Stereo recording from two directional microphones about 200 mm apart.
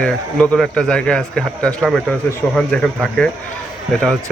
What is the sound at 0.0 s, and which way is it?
Speech, 5° left (ahead or behind).